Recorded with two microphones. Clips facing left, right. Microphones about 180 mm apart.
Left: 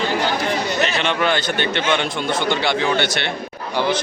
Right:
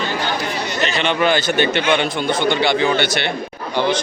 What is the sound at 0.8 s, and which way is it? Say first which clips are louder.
A man's voice: right 5 dB; centre (ahead or behind).